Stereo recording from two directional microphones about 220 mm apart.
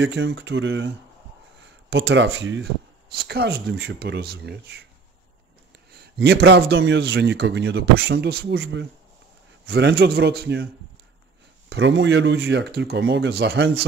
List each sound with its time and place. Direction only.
0.0 s speech: 55° right (ahead or behind)
5.9 s speech: 50° right (ahead or behind)
11.7 s speech: 55° right (ahead or behind)